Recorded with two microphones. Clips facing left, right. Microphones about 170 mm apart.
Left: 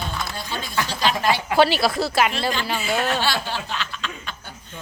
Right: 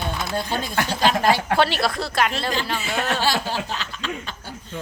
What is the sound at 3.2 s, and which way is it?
Speech, 40° right (ahead or behind).